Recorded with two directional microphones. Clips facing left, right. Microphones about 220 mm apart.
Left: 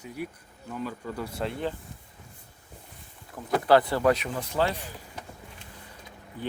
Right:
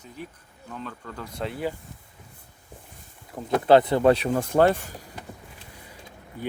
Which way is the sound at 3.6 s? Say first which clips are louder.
Right 4 dB; 20° right (ahead or behind).